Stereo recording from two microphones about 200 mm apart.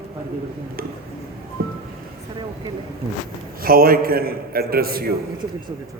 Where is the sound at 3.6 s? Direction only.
45° right (ahead or behind).